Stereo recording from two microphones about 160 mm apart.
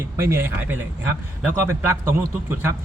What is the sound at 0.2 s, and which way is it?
A man's voice, 15° right (ahead or behind).